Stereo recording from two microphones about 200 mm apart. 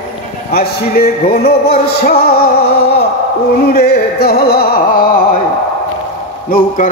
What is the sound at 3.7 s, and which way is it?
Speech, 50° left (ahead or behind).